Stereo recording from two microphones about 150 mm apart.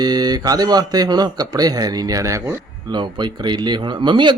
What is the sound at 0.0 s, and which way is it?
Speech, 25° right (ahead or behind).